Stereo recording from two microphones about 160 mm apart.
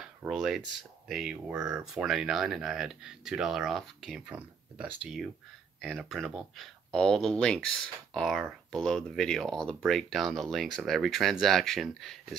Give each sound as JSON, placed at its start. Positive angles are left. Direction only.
{"t": 0.2, "sound": "speech", "side_deg": -5}